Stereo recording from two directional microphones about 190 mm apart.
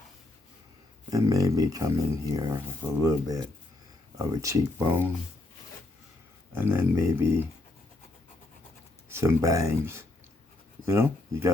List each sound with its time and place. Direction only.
1.1 s speech: 20° right (ahead or behind)
6.5 s speech: 10° right (ahead or behind)
9.0 s speech: 15° right (ahead or behind)